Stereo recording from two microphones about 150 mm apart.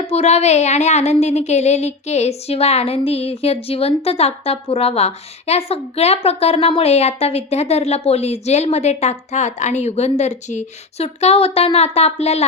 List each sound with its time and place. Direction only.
0.1 s speech: 45° left (ahead or behind)